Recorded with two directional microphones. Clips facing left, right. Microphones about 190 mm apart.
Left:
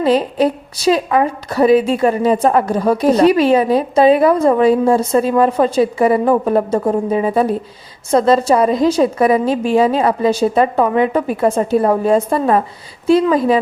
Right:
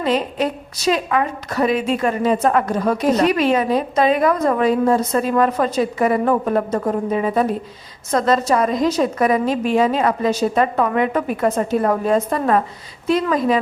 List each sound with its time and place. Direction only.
0.0 s a woman's voice: 35° left (ahead or behind)